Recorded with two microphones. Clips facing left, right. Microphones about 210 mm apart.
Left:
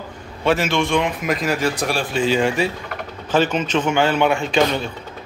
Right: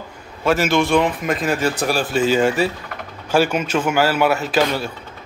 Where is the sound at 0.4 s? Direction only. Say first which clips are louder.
Right 2 dB; centre (ahead or behind).